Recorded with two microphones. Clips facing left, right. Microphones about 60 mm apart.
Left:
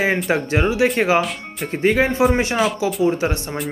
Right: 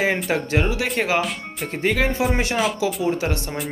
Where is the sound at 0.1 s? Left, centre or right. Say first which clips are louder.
Left 2 dB; centre.